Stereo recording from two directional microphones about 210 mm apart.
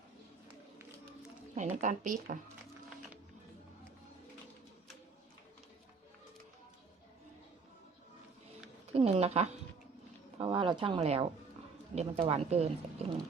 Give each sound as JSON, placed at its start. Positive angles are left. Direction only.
{"t": 1.7, "sound": "speech", "side_deg": -35}
{"t": 8.9, "sound": "speech", "side_deg": -30}